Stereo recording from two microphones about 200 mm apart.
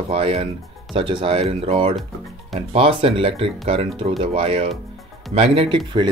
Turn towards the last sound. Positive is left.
turn(degrees=-25)  # may be behind; listen again after turning